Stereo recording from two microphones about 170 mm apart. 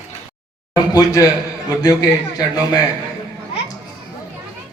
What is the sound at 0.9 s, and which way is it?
A man's voice, 20° left (ahead or behind).